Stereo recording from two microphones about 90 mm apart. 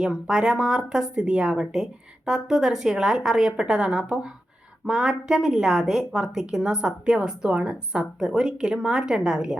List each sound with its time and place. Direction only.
0.0 s a woman's voice: 10° right (ahead or behind)